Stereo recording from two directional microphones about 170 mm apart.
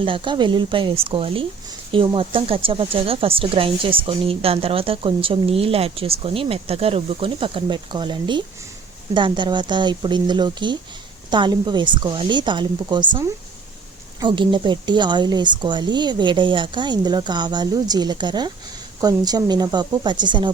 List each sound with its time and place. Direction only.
0.0 s a woman's voice: 30° right (ahead or behind)